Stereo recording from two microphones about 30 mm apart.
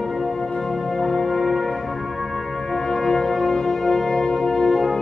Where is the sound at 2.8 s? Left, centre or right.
Centre.